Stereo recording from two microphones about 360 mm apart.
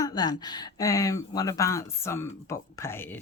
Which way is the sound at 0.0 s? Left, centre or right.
Centre.